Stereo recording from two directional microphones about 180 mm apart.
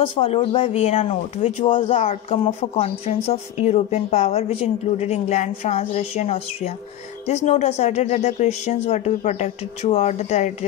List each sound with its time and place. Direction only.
0.3 s a woman's voice: 30° left (ahead or behind)